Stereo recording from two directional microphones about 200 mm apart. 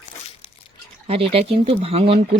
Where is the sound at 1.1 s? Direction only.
30° right (ahead or behind).